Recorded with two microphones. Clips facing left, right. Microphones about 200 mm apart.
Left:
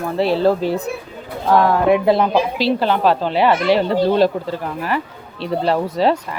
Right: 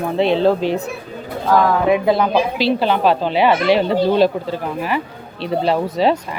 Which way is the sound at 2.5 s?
15° right (ahead or behind).